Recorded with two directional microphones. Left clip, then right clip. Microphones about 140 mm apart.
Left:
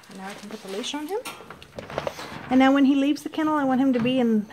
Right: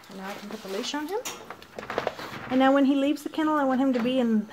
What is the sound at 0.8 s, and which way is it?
Speech, 25° left (ahead or behind).